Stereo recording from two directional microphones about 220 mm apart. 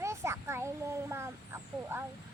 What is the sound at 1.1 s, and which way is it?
Vehicle, 10° right (ahead or behind).